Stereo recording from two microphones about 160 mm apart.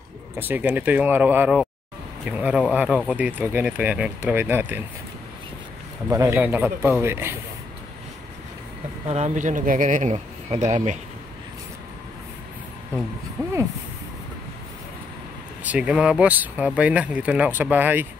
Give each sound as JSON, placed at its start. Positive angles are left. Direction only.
{"t": 0.4, "sound": "speech", "side_deg": -10}
{"t": 6.0, "sound": "speech", "side_deg": -20}
{"t": 9.0, "sound": "speech", "side_deg": -45}
{"t": 13.4, "sound": "speech", "side_deg": -20}
{"t": 15.6, "sound": "speech", "side_deg": -5}